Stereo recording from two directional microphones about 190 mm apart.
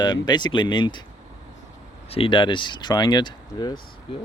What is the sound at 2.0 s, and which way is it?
Speech, 30° left (ahead or behind).